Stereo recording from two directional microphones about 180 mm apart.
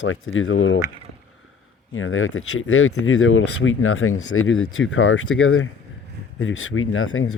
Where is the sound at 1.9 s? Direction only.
90° left.